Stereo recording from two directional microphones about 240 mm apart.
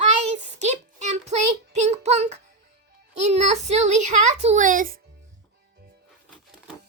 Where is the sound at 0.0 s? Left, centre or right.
Right.